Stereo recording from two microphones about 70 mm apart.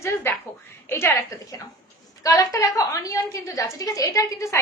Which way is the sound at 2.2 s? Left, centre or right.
Left.